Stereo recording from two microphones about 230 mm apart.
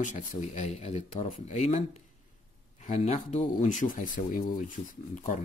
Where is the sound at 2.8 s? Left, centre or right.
Left.